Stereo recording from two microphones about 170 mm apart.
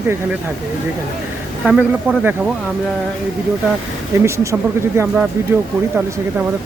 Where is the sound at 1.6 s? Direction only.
5° right (ahead or behind).